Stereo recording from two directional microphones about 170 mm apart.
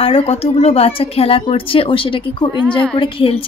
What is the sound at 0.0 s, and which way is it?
A woman's voice, 35° left (ahead or behind).